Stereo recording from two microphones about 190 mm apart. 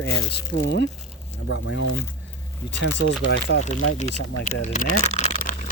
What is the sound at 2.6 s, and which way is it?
Speech, 70° left (ahead or behind).